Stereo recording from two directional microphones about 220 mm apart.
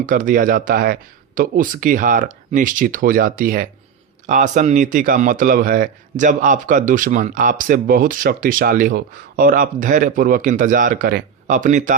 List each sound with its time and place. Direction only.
0.0 s speech: 40° right (ahead or behind)